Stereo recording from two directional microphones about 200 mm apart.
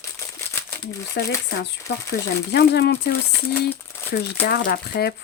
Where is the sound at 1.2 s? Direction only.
60° left (ahead or behind).